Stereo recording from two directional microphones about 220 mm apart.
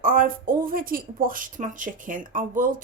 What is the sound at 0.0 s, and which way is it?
A woman's voice, 40° right (ahead or behind).